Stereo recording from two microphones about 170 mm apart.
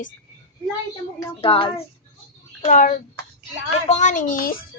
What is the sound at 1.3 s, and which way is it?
Speech, 35° left (ahead or behind).